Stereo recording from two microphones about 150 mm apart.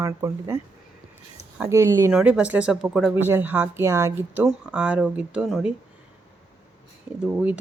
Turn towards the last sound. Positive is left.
turn(degrees=-10)  # may be behind; listen again after turning